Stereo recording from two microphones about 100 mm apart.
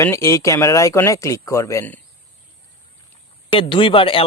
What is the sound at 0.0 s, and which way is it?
Speech, 25° left (ahead or behind).